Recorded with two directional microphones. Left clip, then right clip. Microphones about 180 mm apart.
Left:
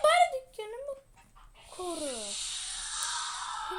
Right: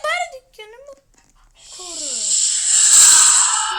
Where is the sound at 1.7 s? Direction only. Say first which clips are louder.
Right 7 dB; 15° left (ahead or behind).